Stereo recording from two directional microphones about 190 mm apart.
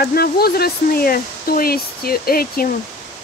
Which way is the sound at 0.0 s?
55° left (ahead or behind).